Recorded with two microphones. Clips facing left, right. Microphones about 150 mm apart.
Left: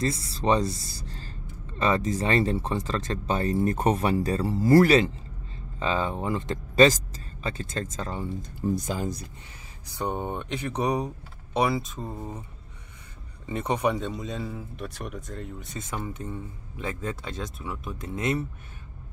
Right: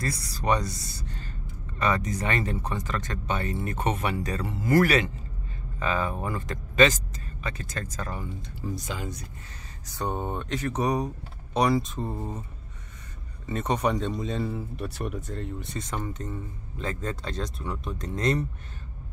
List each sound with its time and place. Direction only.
0.0 s speech: 25° left (ahead or behind)
8.4 s speech: 50° left (ahead or behind)
9.9 s speech: 15° left (ahead or behind)
13.5 s speech: 15° left (ahead or behind)